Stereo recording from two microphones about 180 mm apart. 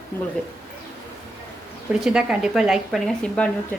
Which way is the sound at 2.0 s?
5° right (ahead or behind).